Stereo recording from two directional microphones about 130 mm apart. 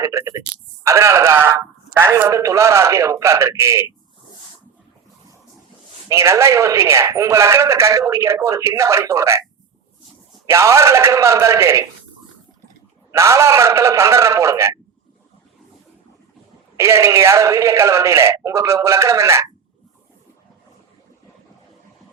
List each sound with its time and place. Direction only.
0.0 s a man's voice: 25° right (ahead or behind)
6.1 s a man's voice: 25° right (ahead or behind)
10.4 s a man's voice: 20° right (ahead or behind)
13.1 s a man's voice: 20° right (ahead or behind)
16.7 s a man's voice: 20° right (ahead or behind)